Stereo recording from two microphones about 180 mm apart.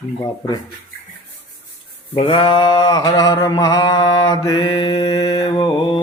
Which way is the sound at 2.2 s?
30° left (ahead or behind).